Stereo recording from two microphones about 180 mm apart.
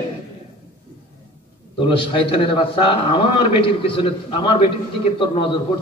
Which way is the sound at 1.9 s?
30° left (ahead or behind).